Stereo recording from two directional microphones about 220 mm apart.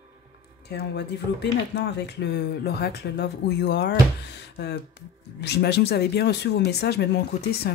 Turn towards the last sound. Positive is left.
turn(degrees=50)  # may be behind; listen again after turning